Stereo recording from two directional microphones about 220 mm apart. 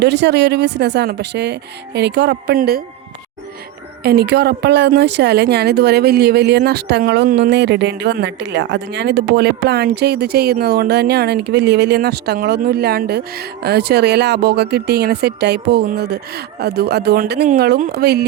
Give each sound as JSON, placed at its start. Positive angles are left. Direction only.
{"t": 0.0, "sound": "a woman's voice", "side_deg": -50}
{"t": 4.0, "sound": "a woman's voice", "side_deg": -45}